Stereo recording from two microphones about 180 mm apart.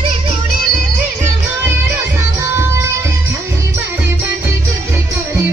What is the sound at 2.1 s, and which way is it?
Music, 15° right (ahead or behind).